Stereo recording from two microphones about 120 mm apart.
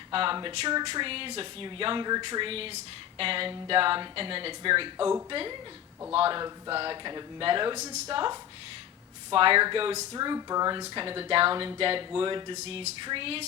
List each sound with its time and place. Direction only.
0.1 s speech: 50° right (ahead or behind)
9.3 s speech: 50° right (ahead or behind)
10.1 s speech: 35° right (ahead or behind)
10.8 s speech: 45° right (ahead or behind)
12.5 s speech: 60° right (ahead or behind)
13.1 s speech: 50° right (ahead or behind)